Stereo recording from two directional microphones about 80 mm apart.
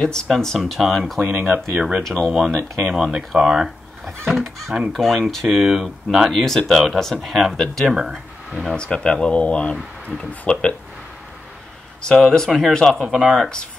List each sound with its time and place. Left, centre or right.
0.0 s speech: centre
1.2 s speech: right
2.0 s speech: centre
7.9 s speech: centre
8.7 s speech: centre
12.0 s speech: centre